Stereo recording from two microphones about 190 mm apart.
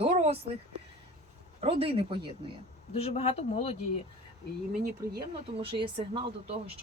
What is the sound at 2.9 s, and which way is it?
Speech, 35° left (ahead or behind).